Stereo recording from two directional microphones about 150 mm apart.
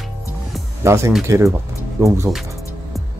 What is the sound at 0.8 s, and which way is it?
Speech, 20° right (ahead or behind).